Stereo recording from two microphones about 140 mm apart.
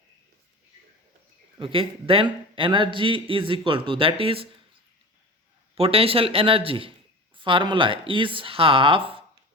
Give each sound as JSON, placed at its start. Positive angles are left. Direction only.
{"t": 1.5, "sound": "a man's voice", "side_deg": -40}
{"t": 5.7, "sound": "a man's voice", "side_deg": -45}